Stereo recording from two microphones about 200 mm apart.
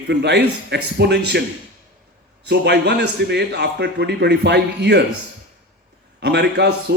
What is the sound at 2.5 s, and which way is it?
A man's voice, 55° right (ahead or behind).